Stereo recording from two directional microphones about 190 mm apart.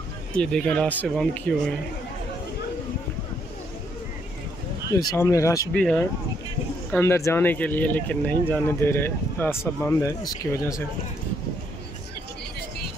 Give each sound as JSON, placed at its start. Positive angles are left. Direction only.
{"t": 0.4, "sound": "speech", "side_deg": 5}
{"t": 4.9, "sound": "speech", "side_deg": 15}
{"t": 5.7, "sound": "speech", "side_deg": 5}